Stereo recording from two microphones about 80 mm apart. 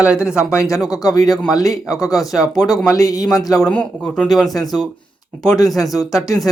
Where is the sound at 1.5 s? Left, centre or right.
Left.